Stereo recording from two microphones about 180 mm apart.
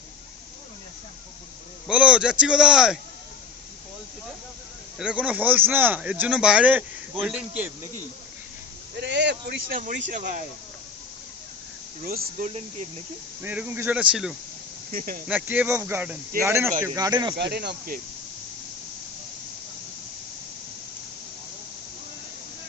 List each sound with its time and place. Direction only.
1.9 s a man's voice: 5° right (ahead or behind)
4.9 s speech: 5° right (ahead or behind)
9.0 s speech: 75° right (ahead or behind); by 10.4 s 45° right (ahead or behind)
12.0 s speech: 55° right (ahead or behind)
12.5 s speech: 35° right (ahead or behind)
13.4 s speech: 10° right (ahead or behind)
14.9 s speech: 50° right (ahead or behind)
15.3 s speech: 10° right (ahead or behind)
17.5 s speech: 65° right (ahead or behind)